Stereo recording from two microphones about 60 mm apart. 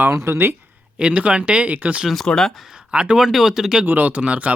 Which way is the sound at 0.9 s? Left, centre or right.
Centre.